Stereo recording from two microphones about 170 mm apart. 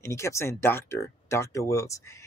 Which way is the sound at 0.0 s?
15° left (ahead or behind).